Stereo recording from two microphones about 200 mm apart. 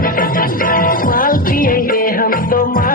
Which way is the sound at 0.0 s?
45° left (ahead or behind).